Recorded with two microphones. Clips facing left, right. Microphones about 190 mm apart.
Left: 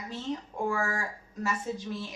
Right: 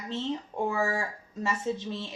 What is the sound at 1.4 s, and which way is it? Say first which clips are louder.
Speech: right 2 dB; 25° right (ahead or behind).